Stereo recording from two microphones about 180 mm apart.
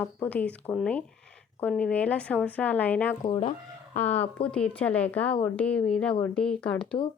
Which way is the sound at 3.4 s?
40° left (ahead or behind).